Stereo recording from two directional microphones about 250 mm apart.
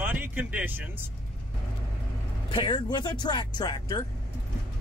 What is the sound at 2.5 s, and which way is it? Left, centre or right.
Speech, centre.